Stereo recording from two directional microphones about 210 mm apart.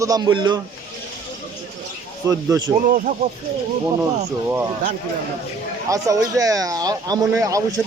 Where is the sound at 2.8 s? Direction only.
40° right (ahead or behind).